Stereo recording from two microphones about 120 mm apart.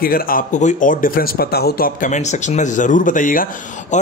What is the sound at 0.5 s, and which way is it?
Speech, 90° left.